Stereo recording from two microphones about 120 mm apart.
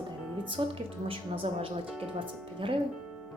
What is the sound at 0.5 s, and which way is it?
Speech, 50° right (ahead or behind).